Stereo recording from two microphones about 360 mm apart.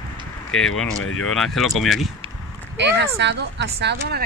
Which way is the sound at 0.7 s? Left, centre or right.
Left.